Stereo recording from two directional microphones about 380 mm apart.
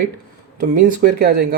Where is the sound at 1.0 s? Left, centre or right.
Right.